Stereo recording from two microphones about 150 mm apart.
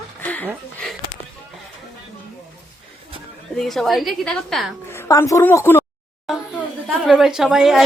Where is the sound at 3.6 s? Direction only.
Centre (ahead or behind).